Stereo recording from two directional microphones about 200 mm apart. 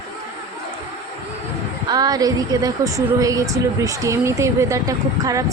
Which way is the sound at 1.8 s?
20° right (ahead or behind).